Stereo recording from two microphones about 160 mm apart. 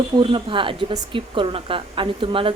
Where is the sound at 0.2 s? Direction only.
30° right (ahead or behind).